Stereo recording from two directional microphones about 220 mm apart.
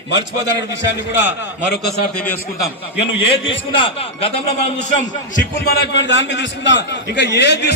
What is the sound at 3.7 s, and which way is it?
Speech, 25° left (ahead or behind).